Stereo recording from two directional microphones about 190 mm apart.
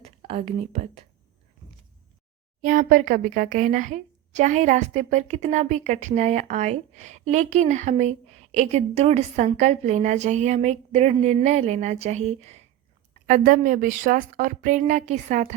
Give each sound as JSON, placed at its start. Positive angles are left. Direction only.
{"t": 0.0, "sound": "speech", "side_deg": -35}
{"t": 2.6, "sound": "a woman's voice", "side_deg": -45}